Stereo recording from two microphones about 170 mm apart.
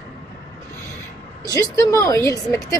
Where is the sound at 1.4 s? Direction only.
20° left (ahead or behind).